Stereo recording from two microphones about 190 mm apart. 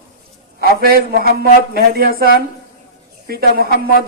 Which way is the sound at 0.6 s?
50° right (ahead or behind).